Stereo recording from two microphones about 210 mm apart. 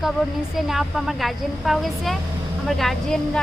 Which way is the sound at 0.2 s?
Centre (ahead or behind).